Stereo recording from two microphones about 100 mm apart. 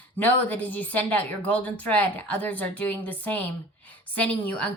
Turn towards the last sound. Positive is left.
turn(degrees=15)  # may be behind; listen again after turning